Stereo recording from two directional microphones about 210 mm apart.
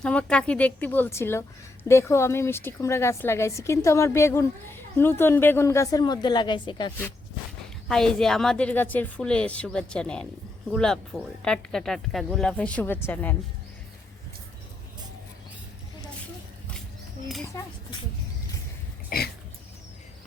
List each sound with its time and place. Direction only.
0.0 s a woman's voice: 5° left (ahead or behind); by 6.9 s 20° left (ahead or behind)
7.9 s speech: centre (ahead or behind)
19.1 s throat clearing: 45° left (ahead or behind)